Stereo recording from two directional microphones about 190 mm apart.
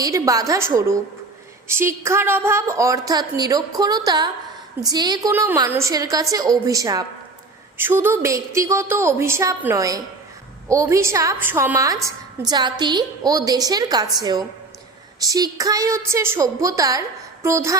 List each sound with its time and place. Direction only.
0.0 s a woman's voice: 15° right (ahead or behind)